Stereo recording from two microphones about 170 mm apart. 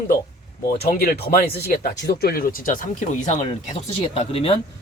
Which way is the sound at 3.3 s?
40° left (ahead or behind).